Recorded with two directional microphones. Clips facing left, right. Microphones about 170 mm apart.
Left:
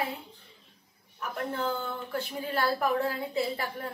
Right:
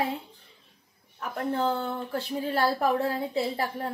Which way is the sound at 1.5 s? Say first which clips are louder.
Right 6 dB; 35° right (ahead or behind).